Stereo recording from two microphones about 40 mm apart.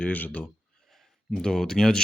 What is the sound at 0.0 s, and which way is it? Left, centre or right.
Speech, left.